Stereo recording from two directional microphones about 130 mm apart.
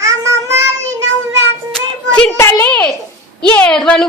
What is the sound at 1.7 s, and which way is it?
Child singing, 5° left (ahead or behind).